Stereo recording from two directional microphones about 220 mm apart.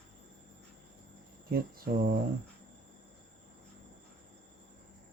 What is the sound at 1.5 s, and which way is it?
Speech, 40° right (ahead or behind).